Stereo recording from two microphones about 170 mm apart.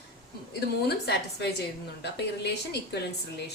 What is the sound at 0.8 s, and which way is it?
A woman's voice, 75° left (ahead or behind).